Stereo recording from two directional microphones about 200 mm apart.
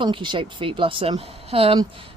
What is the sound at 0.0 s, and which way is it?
Speech, 25° right (ahead or behind).